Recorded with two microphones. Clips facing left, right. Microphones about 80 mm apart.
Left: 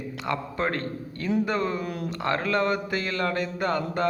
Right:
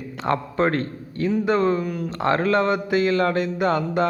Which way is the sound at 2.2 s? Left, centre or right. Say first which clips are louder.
Right 5 dB; right.